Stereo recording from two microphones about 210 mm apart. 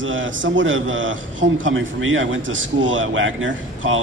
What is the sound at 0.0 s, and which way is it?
A man's voice, 65° right (ahead or behind).